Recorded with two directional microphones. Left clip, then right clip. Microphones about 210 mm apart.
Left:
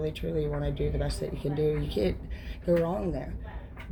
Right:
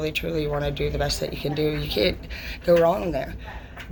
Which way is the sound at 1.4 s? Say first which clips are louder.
Right 2 dB; 35° right (ahead or behind).